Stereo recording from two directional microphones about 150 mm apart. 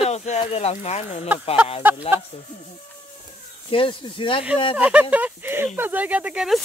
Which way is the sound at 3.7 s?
35° left (ahead or behind).